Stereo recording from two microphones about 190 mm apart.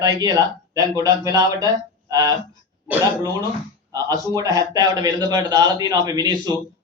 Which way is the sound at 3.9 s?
20° right (ahead or behind).